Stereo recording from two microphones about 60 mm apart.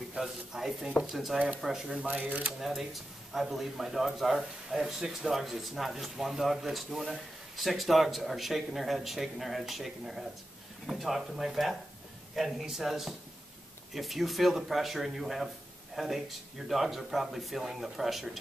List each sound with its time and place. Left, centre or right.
0.1 s speech: centre
2.0 s speech: right
2.6 s speech: centre